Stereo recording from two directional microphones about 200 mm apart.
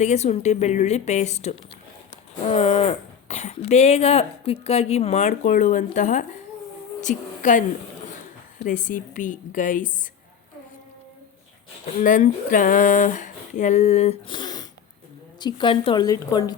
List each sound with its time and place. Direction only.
0.0 s a woman's voice: 35° left (ahead or behind)
11.9 s a woman's voice: 40° left (ahead or behind); by 16.6 s 20° left (ahead or behind)